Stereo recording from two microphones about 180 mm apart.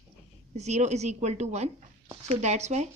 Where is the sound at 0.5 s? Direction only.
40° right (ahead or behind).